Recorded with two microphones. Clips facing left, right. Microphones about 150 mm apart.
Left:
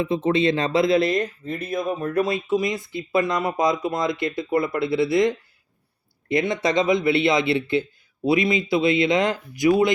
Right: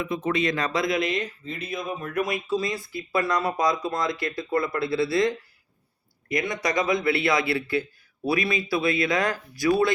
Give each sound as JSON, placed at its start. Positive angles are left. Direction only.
{"t": 0.0, "sound": "speech", "side_deg": 30}